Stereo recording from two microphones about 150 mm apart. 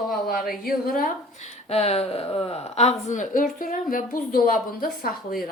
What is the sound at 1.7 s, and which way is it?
Speech, 45° left (ahead or behind).